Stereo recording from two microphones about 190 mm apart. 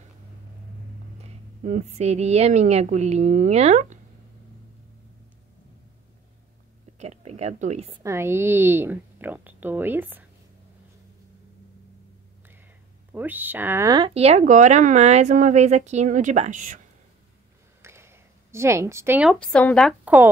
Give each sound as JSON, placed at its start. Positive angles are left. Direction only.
{"t": 1.6, "sound": "speech", "side_deg": -40}
{"t": 7.0, "sound": "a sound", "side_deg": -35}
{"t": 8.0, "sound": "a woman's voice", "side_deg": -15}
{"t": 13.1, "sound": "speech", "side_deg": -10}
{"t": 17.8, "sound": "a sound", "side_deg": -15}
{"t": 19.4, "sound": "speech", "side_deg": 5}